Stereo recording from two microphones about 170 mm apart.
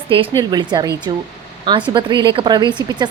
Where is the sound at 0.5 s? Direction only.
25° right (ahead or behind).